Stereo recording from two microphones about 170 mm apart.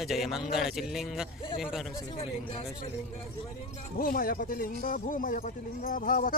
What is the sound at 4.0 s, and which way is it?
Speech, 60° left (ahead or behind).